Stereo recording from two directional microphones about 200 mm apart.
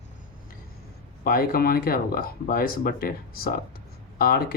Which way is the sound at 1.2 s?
45° left (ahead or behind).